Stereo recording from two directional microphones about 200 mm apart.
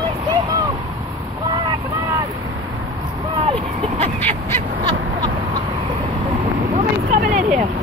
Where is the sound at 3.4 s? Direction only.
30° right (ahead or behind).